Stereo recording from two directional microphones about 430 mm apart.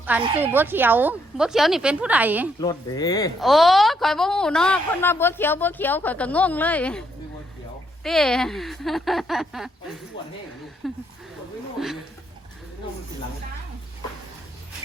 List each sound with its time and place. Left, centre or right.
0.0 s speech: centre
2.6 s speech: centre
8.0 s speech: centre
10.2 s speech: centre
10.8 s a sound: centre